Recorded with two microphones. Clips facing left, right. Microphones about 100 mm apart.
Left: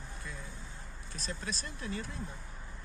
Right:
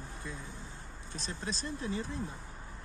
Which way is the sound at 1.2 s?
30° right (ahead or behind).